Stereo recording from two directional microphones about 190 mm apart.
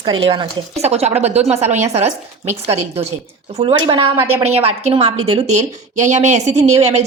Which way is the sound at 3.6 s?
25° right (ahead or behind).